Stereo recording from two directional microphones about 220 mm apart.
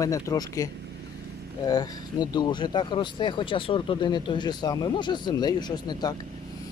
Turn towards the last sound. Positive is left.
turn(degrees=20)  # may be behind; listen again after turning